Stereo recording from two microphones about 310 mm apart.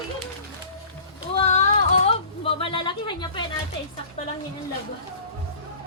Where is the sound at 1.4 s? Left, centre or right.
Left.